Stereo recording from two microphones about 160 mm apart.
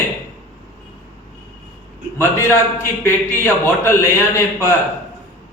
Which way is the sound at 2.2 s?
15° left (ahead or behind).